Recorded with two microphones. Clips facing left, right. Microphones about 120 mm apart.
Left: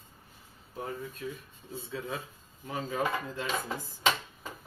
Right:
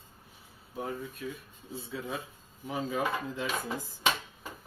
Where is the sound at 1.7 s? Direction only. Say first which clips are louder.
Even; 10° right (ahead or behind).